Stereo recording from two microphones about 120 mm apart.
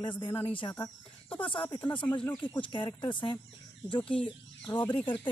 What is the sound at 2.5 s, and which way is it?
Speech, 45° left (ahead or behind).